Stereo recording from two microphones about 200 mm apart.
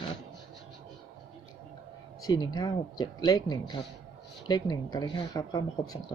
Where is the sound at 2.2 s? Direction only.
20° left (ahead or behind).